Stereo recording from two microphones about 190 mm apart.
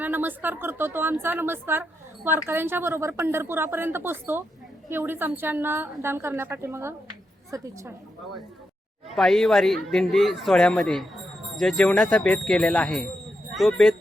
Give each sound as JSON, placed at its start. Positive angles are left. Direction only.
{"t": 0.0, "sound": "a woman's voice", "side_deg": -10}
{"t": 9.1, "sound": "speech", "side_deg": 0}